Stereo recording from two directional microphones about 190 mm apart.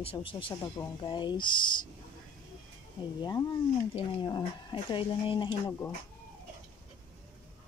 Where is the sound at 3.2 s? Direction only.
20° left (ahead or behind).